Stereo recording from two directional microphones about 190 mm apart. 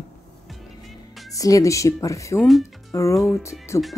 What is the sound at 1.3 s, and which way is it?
Speech, 20° left (ahead or behind).